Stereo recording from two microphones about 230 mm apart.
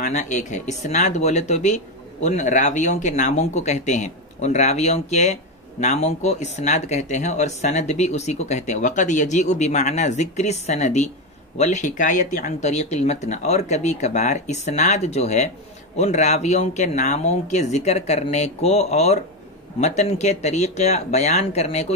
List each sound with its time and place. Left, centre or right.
0.0 s speech: left